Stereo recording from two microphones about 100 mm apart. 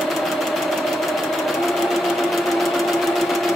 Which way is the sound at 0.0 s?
Centre (ahead or behind).